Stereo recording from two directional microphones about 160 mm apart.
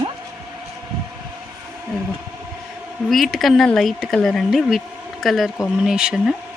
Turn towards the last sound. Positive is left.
turn(degrees=-5)  # may be behind; listen again after turning